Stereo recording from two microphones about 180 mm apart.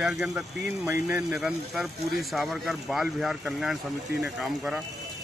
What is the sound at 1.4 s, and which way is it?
Speech, centre (ahead or behind).